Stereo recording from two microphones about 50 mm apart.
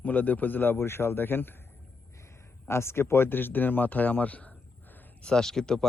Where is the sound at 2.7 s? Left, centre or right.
Left.